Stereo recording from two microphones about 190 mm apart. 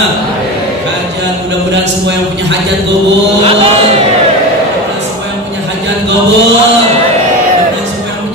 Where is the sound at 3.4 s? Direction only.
30° right (ahead or behind).